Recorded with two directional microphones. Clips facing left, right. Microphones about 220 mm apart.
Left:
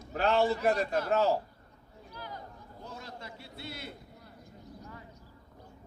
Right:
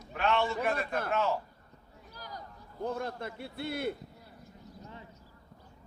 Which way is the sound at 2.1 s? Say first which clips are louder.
Left 2 dB; 40° right (ahead or behind).